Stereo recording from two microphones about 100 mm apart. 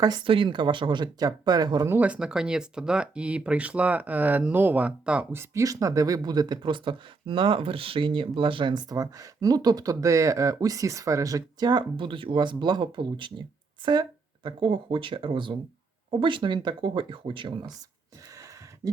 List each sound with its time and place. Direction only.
0.3 s speech: 55° right (ahead or behind)
1.9 s speech: 15° right (ahead or behind)
5.4 s speech: 35° right (ahead or behind); by 17.7 s 55° right (ahead or behind)
18.3 s a sound: 35° right (ahead or behind)